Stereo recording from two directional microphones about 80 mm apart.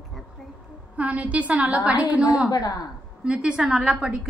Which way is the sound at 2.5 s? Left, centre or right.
Left.